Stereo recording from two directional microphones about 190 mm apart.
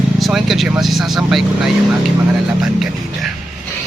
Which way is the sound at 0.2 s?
Centre (ahead or behind).